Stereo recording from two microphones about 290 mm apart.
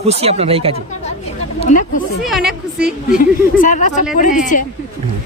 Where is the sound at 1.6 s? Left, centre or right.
Left.